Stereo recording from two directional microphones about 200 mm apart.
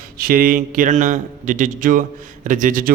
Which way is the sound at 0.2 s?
45° right (ahead or behind).